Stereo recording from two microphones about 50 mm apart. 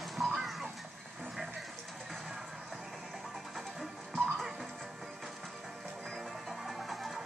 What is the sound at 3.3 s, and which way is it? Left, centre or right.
Music, centre.